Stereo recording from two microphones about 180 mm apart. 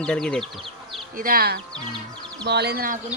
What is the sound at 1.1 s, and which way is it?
Speech, 50° right (ahead or behind).